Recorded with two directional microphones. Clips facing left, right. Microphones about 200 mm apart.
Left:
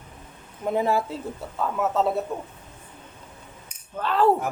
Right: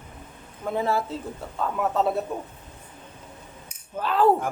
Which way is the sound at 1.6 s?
5° left (ahead or behind).